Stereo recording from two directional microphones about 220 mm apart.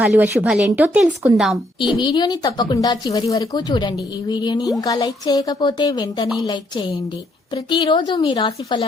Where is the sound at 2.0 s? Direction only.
20° left (ahead or behind).